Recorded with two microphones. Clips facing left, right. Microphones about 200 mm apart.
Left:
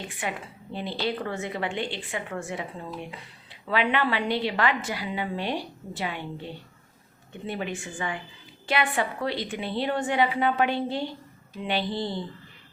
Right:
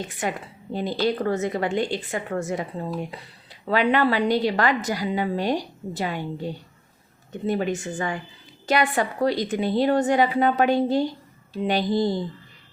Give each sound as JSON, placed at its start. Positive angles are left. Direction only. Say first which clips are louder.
{"t": 0.2, "sound": "a woman's voice", "louder": "right 4 dB", "side_deg": -40}